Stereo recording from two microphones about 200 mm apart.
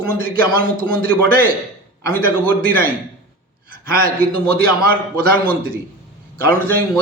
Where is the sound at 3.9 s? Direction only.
45° right (ahead or behind).